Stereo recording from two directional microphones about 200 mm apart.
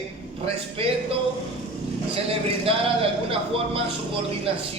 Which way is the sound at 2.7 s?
30° right (ahead or behind).